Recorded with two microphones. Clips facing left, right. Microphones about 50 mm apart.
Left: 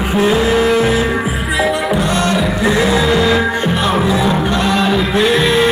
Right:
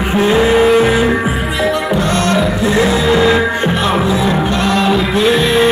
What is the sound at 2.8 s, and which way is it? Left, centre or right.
Music, centre.